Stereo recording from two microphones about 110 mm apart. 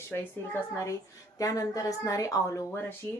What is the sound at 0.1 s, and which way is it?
Speech, 20° left (ahead or behind).